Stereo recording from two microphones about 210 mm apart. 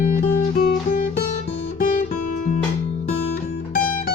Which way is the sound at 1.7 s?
40° left (ahead or behind).